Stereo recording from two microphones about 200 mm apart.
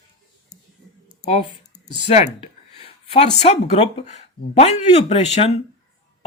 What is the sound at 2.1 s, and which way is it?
Speech, 30° left (ahead or behind).